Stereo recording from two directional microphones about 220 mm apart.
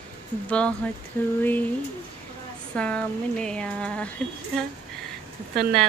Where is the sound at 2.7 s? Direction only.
5° left (ahead or behind).